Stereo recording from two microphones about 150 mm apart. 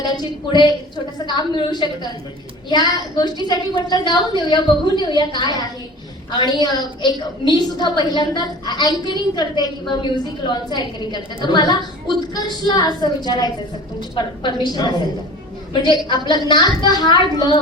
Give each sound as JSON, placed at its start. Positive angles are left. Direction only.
{"t": 1.3, "sound": "a woman's voice", "side_deg": 30}